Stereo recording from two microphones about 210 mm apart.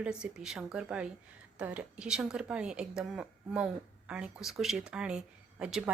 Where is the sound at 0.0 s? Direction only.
5° right (ahead or behind).